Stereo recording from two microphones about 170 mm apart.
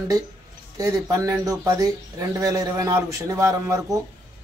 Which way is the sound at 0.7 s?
20° right (ahead or behind).